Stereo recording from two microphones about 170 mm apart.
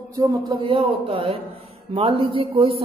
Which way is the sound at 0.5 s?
30° right (ahead or behind).